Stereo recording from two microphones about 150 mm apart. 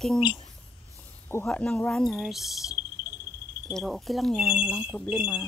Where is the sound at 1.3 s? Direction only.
10° left (ahead or behind).